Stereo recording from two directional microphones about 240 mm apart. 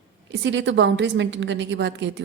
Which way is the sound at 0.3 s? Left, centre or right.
Right.